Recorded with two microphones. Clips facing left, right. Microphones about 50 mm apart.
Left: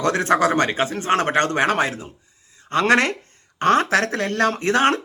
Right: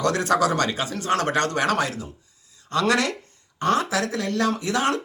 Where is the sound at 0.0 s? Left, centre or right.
Left.